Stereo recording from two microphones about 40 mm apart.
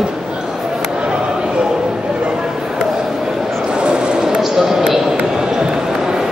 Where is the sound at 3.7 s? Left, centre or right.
Right.